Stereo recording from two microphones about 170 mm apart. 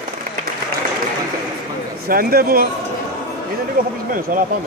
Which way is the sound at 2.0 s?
60° right (ahead or behind).